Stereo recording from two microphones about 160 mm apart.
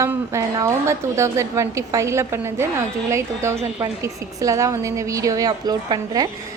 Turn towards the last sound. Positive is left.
turn(degrees=-25)  # may be behind; listen again after turning